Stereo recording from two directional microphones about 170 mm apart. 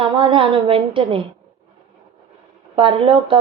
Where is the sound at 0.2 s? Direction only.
30° right (ahead or behind).